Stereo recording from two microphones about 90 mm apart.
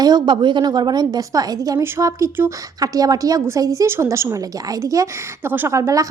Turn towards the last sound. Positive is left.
turn(degrees=-35)  # may be behind; listen again after turning